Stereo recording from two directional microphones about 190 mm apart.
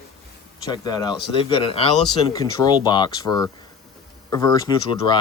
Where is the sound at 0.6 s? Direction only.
20° left (ahead or behind).